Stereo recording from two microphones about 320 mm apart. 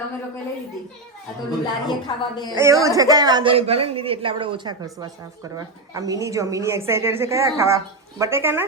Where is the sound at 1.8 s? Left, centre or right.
Centre.